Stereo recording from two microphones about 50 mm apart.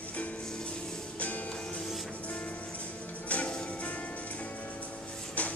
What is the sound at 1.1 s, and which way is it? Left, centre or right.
Music, left.